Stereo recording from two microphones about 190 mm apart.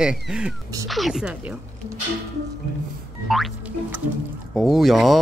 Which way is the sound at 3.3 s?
Centre (ahead or behind).